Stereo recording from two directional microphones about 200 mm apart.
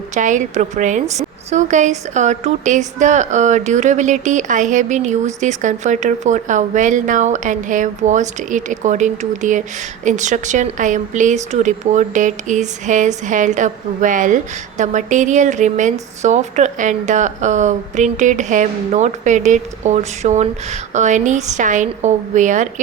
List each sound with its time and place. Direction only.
0.1 s a woman's voice: 40° right (ahead or behind)